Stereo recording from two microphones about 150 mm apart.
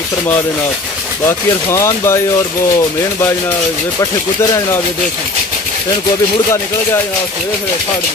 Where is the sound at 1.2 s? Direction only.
20° left (ahead or behind).